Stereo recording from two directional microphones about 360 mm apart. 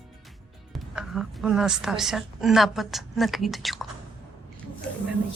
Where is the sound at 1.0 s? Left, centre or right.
Centre.